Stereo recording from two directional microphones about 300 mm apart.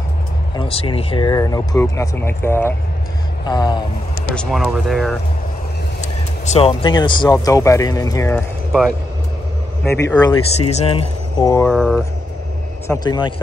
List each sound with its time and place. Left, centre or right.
0.6 s speech: centre
4.4 s speech: centre
5.9 s speech: left; by 8.9 s centre
10.0 s speech: centre
11.7 s speech: centre
12.8 s speech: centre